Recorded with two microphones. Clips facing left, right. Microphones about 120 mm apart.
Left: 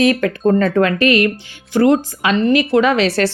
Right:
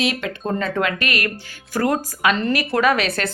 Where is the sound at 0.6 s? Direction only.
30° left (ahead or behind).